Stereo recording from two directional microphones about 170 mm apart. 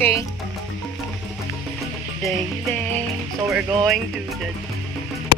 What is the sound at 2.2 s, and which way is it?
Speech, 10° left (ahead or behind).